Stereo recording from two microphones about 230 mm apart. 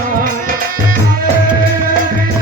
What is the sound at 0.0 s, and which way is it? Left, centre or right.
Music, right.